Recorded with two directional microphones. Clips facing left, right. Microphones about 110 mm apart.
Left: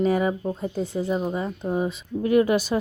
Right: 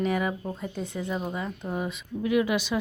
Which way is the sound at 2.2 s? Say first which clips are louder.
Left 5 dB; 45° left (ahead or behind).